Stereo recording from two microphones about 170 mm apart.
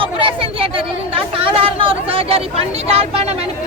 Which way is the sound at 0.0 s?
30° right (ahead or behind).